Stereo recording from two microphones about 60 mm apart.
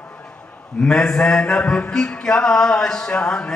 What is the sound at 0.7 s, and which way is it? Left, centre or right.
Mantra, centre.